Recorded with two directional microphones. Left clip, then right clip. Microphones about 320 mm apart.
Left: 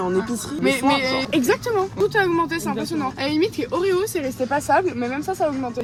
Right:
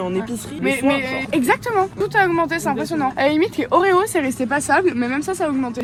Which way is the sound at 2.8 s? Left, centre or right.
Centre.